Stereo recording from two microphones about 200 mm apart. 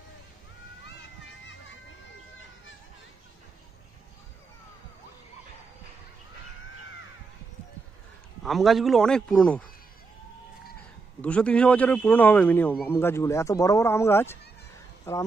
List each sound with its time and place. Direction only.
0.8 s a sound: 65° left (ahead or behind)
8.5 s a man's voice: centre (ahead or behind)
11.1 s speech: 5° left (ahead or behind)